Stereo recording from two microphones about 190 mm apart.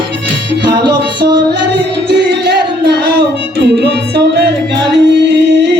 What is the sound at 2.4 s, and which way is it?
Music, 60° right (ahead or behind).